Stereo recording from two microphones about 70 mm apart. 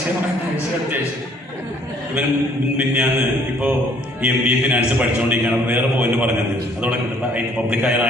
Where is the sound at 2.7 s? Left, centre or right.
Right.